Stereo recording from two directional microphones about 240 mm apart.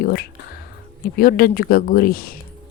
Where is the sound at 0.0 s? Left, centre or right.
Left.